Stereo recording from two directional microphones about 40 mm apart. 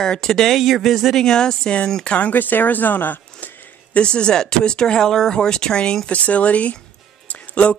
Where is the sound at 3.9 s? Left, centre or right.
Left.